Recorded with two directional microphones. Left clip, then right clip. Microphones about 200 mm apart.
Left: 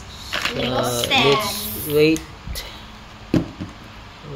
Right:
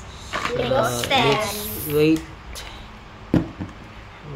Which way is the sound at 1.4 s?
5° left (ahead or behind).